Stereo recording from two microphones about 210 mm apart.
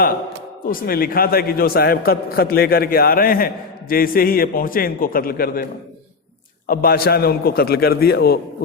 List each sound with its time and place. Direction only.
0.6 s a man's voice: 45° left (ahead or behind)
6.7 s a man's voice: 45° left (ahead or behind)